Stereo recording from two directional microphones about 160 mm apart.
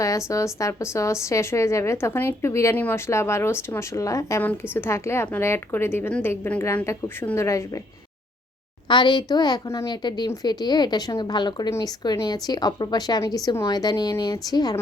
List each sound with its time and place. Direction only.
0.0 s a woman's voice: 20° left (ahead or behind)
8.9 s a woman's voice: 30° left (ahead or behind)